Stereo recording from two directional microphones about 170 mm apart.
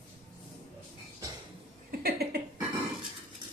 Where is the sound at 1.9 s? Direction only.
65° right (ahead or behind).